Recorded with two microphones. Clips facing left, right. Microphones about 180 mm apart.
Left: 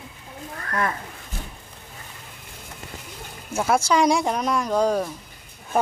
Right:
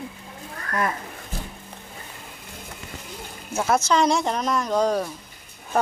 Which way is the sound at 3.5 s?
10° left (ahead or behind).